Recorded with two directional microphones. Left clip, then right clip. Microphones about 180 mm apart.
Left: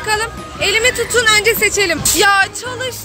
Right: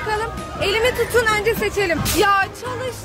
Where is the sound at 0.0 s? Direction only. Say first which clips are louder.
Left 5 dB; 5° left (ahead or behind).